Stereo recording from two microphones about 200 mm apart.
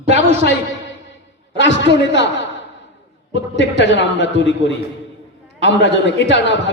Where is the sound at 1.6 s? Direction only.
65° left (ahead or behind).